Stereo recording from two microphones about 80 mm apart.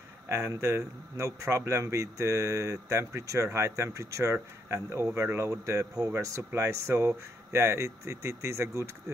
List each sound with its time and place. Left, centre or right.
0.3 s speech: right